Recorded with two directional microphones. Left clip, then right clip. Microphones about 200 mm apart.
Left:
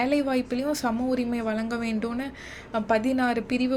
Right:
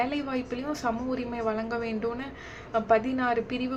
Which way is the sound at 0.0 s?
45° left (ahead or behind).